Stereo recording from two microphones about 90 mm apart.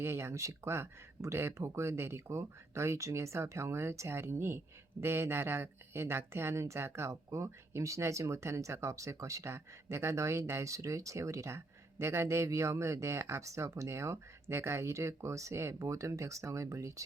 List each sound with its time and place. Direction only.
0.0 s speech: 30° right (ahead or behind)